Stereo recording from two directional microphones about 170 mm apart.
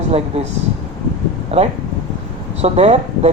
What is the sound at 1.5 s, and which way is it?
A woman's voice, 40° right (ahead or behind).